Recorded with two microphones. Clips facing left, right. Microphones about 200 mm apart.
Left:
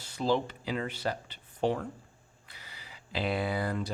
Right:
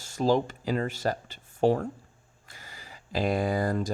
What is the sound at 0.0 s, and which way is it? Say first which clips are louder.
Speech: right 4 dB; 45° right (ahead or behind).